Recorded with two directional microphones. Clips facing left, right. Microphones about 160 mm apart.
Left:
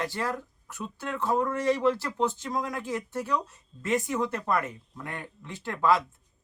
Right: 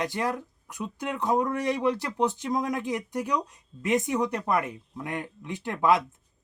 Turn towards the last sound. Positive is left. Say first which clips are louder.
# right 1 dB
turn(degrees=-15)  # may be behind; listen again after turning